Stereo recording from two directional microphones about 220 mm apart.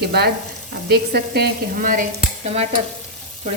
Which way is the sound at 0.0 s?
45° right (ahead or behind).